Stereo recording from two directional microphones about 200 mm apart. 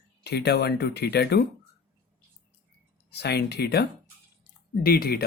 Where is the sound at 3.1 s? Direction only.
55° left (ahead or behind).